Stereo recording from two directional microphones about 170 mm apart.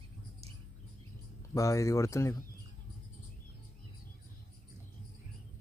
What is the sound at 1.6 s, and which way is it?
Speech, 20° left (ahead or behind).